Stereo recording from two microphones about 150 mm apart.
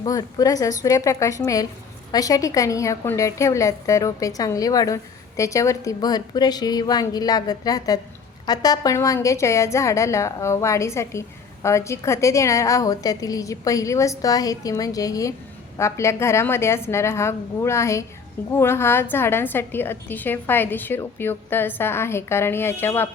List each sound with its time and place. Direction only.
0.0 s a woman's voice: 25° left (ahead or behind)